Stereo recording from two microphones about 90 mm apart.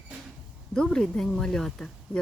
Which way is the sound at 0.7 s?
5° left (ahead or behind).